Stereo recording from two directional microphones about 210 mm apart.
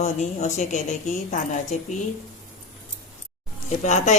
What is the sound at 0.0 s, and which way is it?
Speech, 30° left (ahead or behind).